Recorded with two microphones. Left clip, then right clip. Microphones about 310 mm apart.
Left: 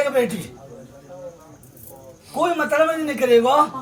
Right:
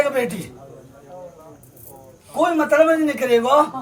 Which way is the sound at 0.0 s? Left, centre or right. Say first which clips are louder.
Even; centre.